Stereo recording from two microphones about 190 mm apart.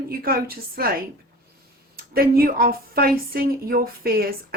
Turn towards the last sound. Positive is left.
turn(degrees=-50)  # may be behind; listen again after turning